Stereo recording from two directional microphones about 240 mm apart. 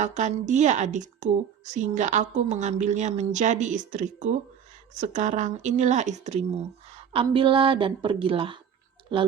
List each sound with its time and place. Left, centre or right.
0.0 s a woman's voice: right